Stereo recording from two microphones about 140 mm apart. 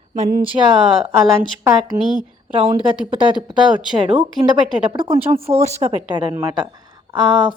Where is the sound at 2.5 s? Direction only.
45° right (ahead or behind).